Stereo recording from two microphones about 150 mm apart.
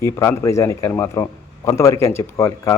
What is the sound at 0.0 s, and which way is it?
A man's voice, 20° left (ahead or behind).